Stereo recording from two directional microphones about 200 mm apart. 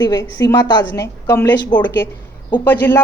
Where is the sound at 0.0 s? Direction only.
15° left (ahead or behind).